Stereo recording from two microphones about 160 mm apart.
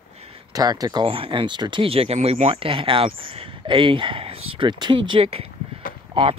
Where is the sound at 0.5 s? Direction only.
25° right (ahead or behind).